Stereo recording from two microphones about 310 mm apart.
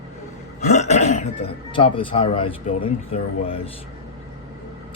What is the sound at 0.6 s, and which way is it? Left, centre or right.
Speech, left.